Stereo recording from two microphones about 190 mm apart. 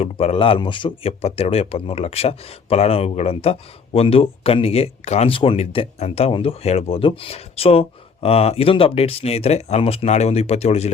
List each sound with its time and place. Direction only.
0.0 s speech: 35° left (ahead or behind)